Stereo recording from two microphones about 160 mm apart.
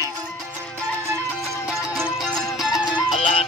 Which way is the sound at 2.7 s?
25° left (ahead or behind).